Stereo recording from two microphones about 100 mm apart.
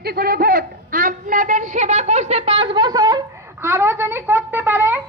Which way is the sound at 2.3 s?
90° right.